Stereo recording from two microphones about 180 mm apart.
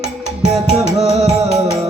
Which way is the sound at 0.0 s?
40° right (ahead or behind).